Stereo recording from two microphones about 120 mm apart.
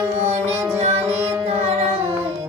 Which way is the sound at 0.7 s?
60° right (ahead or behind).